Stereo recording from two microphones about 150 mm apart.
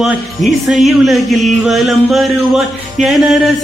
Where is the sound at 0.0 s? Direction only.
Centre (ahead or behind).